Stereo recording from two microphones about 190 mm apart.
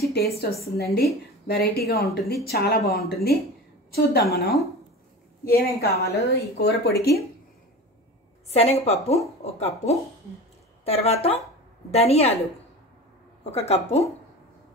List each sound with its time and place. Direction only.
0.1 s a woman's voice: 55° left (ahead or behind)
5.4 s a woman's voice: 55° left (ahead or behind)
8.5 s a woman's voice: 35° left (ahead or behind)
13.5 s a woman's voice: 35° left (ahead or behind)